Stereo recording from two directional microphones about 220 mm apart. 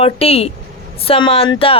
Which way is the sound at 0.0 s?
25° left (ahead or behind).